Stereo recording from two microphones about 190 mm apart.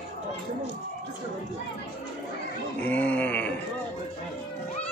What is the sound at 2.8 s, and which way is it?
Groan, 10° left (ahead or behind).